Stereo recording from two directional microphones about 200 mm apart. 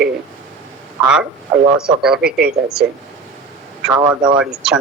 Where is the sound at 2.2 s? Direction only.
50° right (ahead or behind).